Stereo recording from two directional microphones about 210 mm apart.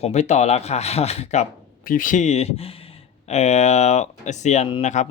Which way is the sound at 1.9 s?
40° left (ahead or behind).